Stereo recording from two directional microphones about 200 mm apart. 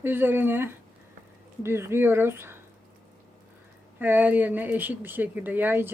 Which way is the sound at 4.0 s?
10° right (ahead or behind).